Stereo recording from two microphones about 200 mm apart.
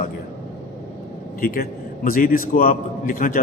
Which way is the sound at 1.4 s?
45° left (ahead or behind).